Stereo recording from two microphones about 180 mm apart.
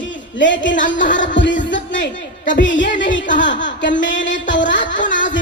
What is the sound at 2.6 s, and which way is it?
Speech, 90° left.